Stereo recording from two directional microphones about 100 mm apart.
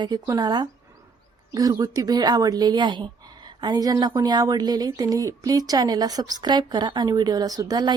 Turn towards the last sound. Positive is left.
turn(degrees=-40)  # may be behind; listen again after turning